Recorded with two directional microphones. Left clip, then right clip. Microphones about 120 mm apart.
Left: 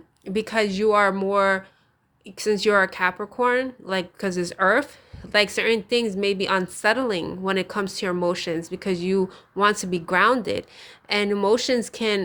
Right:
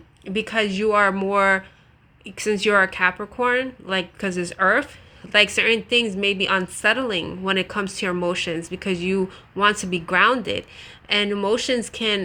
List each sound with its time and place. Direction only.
0.3 s a woman's voice: 45° left (ahead or behind)
1.1 s a woman's voice: 20° left (ahead or behind); by 12.2 s 45° left (ahead or behind)